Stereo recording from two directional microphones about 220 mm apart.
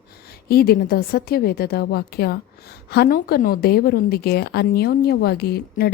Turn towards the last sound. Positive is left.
turn(degrees=45)  # may be behind; listen again after turning